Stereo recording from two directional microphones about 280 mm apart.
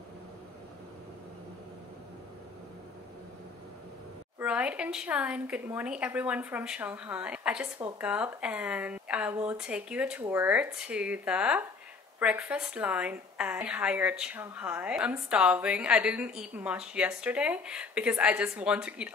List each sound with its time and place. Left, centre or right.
4.4 s speech: centre